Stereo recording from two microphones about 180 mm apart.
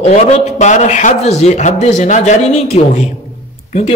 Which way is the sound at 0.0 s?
40° left (ahead or behind).